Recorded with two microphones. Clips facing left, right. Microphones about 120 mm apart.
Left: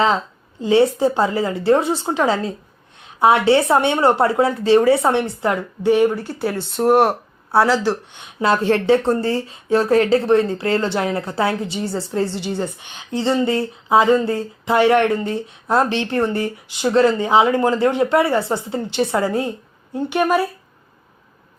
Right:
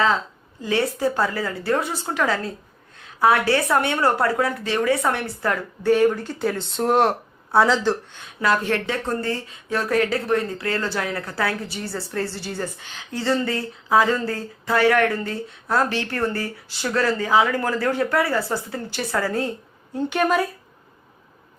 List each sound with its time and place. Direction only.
0.6 s speech: 25° left (ahead or behind); by 7.9 s 10° left (ahead or behind)
8.1 s speech: 20° left (ahead or behind)